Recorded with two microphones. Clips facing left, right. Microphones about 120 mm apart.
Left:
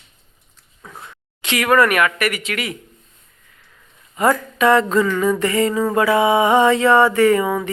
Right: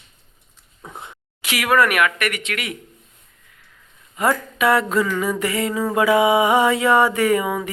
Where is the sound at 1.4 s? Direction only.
5° right (ahead or behind).